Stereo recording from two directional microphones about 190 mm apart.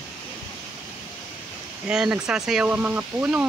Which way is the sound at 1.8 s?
5° right (ahead or behind).